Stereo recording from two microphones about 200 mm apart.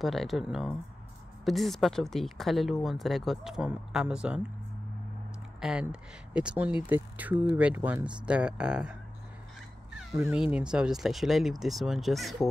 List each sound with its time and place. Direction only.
0.0 s speech: centre (ahead or behind)
5.6 s speech: 5° right (ahead or behind)
10.2 s speech: 5° right (ahead or behind)